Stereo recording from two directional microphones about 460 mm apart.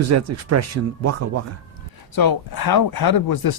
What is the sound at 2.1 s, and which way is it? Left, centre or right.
Speech, left.